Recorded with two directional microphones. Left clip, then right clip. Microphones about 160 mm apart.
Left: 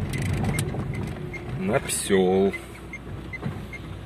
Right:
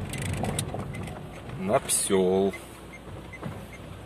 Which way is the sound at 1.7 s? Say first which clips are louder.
Left 1 dB; 30° right (ahead or behind).